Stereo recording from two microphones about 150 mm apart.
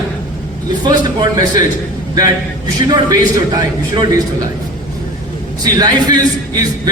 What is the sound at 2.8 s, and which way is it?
A man's voice, 25° right (ahead or behind).